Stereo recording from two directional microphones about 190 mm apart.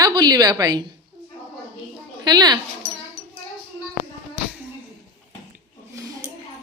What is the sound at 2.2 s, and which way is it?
Speech, 20° right (ahead or behind).